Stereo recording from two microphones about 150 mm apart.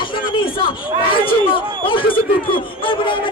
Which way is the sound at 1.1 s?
35° left (ahead or behind).